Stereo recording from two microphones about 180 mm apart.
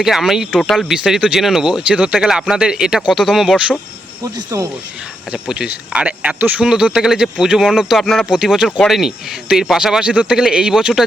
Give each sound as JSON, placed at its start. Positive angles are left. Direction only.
{"t": 0.0, "sound": "speech", "side_deg": 0}
{"t": 4.2, "sound": "speech", "side_deg": -20}
{"t": 5.3, "sound": "speech", "side_deg": -5}